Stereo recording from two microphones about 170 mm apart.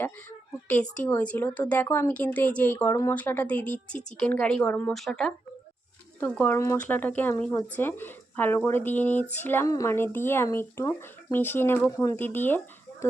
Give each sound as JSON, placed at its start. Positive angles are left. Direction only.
{"t": 0.0, "sound": "speech", "side_deg": 10}